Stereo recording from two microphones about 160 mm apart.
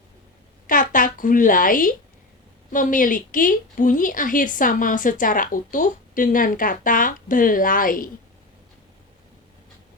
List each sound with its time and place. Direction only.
0.7 s a woman's voice: 55° left (ahead or behind)